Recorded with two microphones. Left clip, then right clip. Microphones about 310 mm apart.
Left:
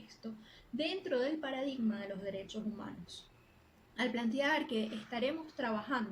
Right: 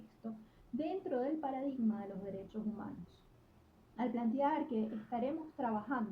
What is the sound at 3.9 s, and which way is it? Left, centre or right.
A woman's voice, left.